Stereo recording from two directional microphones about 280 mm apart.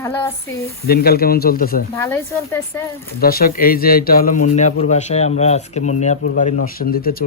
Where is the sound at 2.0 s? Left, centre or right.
Centre.